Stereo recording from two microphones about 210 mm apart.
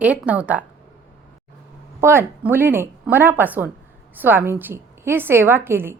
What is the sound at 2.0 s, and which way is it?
A woman's voice, 10° right (ahead or behind).